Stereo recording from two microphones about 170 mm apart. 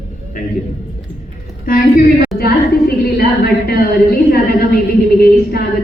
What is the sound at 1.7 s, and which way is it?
Speech, 60° left (ahead or behind).